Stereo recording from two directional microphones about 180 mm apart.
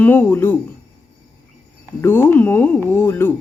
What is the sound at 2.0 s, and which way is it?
A woman's voice, 10° left (ahead or behind).